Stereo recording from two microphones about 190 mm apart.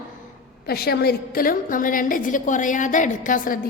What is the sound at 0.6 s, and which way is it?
A woman's voice, 55° left (ahead or behind).